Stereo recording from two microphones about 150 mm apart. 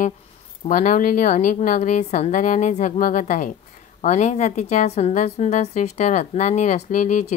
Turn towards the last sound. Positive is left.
turn(degrees=55)  # may be behind; listen again after turning